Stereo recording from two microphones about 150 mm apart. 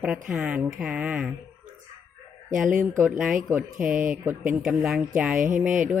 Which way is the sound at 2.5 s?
65° right (ahead or behind).